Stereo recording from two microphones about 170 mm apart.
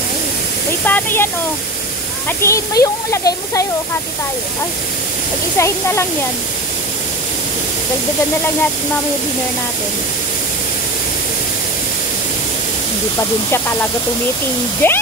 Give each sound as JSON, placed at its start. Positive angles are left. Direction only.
{"t": 0.8, "sound": "speech", "side_deg": 10}
{"t": 5.6, "sound": "speech", "side_deg": 15}
{"t": 14.8, "sound": "speech", "side_deg": 10}